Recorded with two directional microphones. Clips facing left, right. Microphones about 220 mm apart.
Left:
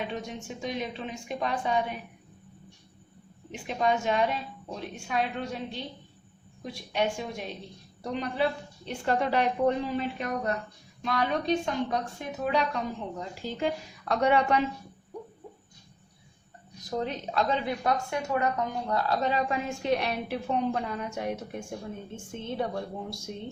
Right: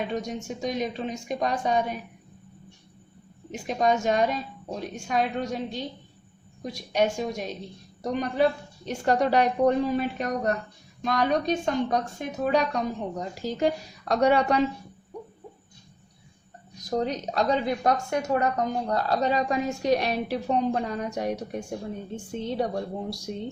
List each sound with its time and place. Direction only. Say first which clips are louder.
0.1 s a woman's voice: right 5 dB; 40° right (ahead or behind)
3.5 s a woman's voice: right 3 dB; 40° right (ahead or behind)
17.0 s a woman's voice: right 2 dB; 40° right (ahead or behind)